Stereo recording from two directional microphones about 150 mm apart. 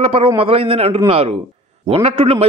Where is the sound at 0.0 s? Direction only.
40° right (ahead or behind).